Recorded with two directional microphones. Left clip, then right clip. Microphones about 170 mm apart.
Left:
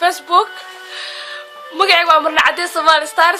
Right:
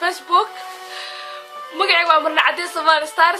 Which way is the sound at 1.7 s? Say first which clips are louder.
Left 4 dB; 45° left (ahead or behind).